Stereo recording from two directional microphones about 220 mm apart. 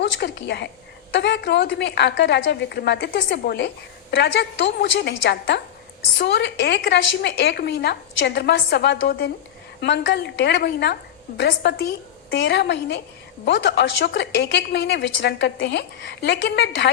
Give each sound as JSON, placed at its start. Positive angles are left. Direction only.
{"t": 0.0, "sound": "a woman's voice", "side_deg": 50}